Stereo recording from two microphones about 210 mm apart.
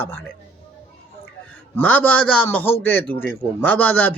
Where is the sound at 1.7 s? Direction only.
5° left (ahead or behind).